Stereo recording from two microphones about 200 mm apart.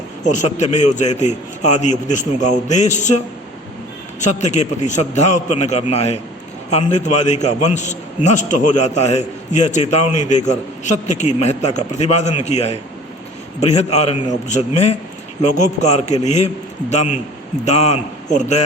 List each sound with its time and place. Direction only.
0.3 s a man's voice: 35° left (ahead or behind)
4.2 s a man's voice: 35° left (ahead or behind)
17.7 s a man's voice: 35° left (ahead or behind)